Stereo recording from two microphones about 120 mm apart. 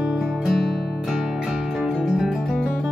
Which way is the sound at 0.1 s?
Centre (ahead or behind).